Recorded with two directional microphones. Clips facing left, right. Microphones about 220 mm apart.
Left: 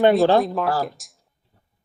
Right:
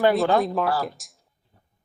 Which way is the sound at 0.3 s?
Centre (ahead or behind).